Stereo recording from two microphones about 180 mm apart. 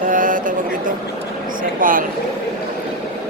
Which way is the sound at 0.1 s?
50° right (ahead or behind).